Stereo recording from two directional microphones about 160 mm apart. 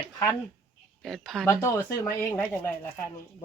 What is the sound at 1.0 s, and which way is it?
Speech, centre (ahead or behind).